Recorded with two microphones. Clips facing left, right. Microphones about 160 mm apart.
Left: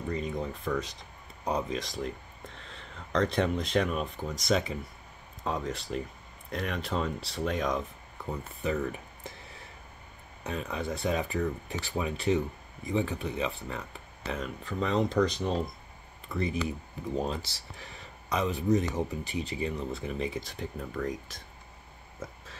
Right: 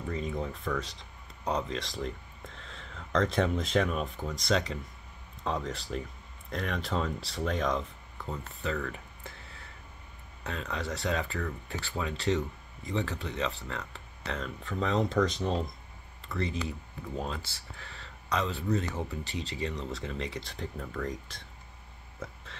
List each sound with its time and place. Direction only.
0.1 s speech: centre (ahead or behind)
16.3 s speech: 15° left (ahead or behind)
22.2 s hiccup: 10° left (ahead or behind)